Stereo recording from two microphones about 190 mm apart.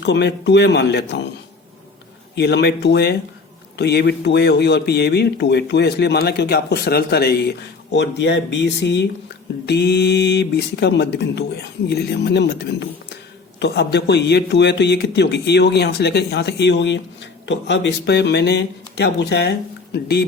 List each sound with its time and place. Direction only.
0.0 s speech: 65° left (ahead or behind)
2.3 s speech: 60° left (ahead or behind)